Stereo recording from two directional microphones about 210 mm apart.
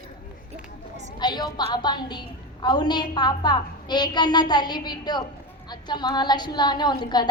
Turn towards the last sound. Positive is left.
turn(degrees=20)  # may be behind; listen again after turning